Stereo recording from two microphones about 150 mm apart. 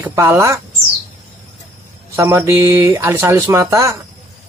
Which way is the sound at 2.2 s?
15° right (ahead or behind).